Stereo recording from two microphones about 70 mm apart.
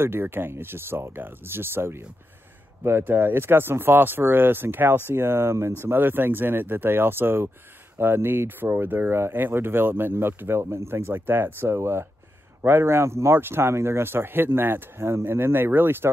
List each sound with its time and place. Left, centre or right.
0.0 s speech: right